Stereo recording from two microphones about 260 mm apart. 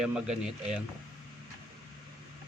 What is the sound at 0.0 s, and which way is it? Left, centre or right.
Speech, centre.